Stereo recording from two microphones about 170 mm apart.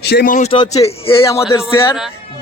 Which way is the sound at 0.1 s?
65° left (ahead or behind).